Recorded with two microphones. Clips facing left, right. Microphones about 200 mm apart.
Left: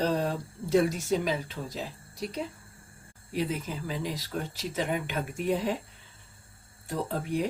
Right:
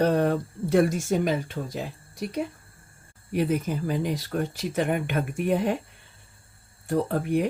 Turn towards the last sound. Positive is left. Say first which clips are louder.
# right 6 dB
turn(degrees=-60)  # may be behind; listen again after turning